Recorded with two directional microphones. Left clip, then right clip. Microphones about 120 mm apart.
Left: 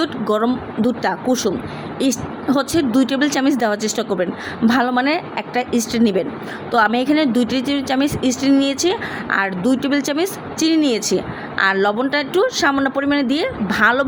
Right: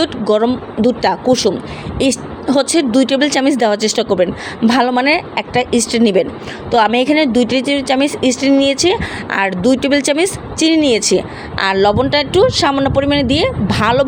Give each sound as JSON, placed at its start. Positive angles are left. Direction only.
{"t": 0.0, "sound": "speech", "side_deg": -35}